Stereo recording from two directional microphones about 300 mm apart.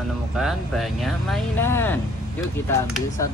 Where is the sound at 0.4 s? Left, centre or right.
Centre.